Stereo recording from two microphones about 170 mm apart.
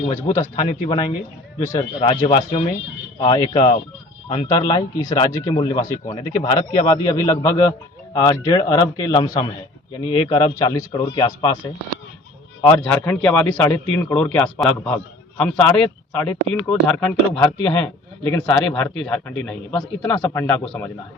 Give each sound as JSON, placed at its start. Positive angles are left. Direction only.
{"t": 0.3, "sound": "speech", "side_deg": 25}
{"t": 2.0, "sound": "a man's voice", "side_deg": 35}